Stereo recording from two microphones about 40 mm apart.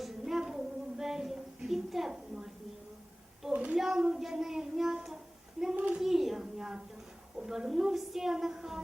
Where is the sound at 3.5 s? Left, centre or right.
Right.